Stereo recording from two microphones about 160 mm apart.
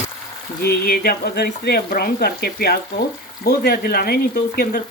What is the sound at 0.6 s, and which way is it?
Speech, 75° left (ahead or behind).